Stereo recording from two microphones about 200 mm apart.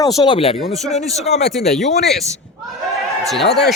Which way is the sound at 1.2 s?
35° left (ahead or behind).